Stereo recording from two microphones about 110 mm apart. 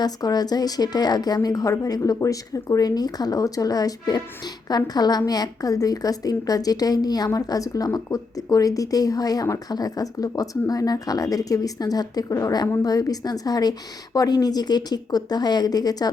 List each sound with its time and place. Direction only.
0.0 s a woman's voice: 35° left (ahead or behind)